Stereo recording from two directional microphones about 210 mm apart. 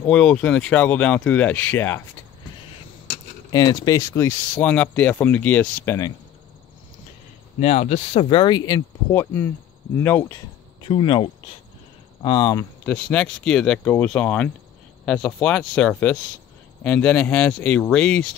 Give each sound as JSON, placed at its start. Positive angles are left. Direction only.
{"t": 0.0, "sound": "speech", "side_deg": 5}
{"t": 3.4, "sound": "speech", "side_deg": 20}
{"t": 7.6, "sound": "speech", "side_deg": 30}
{"t": 10.8, "sound": "speech", "side_deg": 20}
{"t": 12.9, "sound": "speech", "side_deg": 5}